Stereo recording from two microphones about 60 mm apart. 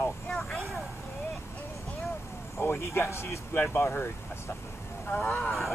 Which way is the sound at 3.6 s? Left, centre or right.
Left.